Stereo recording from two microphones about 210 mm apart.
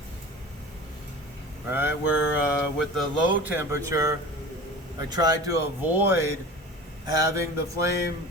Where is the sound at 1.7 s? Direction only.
10° right (ahead or behind).